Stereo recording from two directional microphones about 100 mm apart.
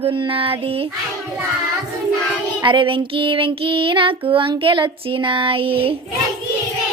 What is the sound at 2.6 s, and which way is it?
Child singing, 55° right (ahead or behind).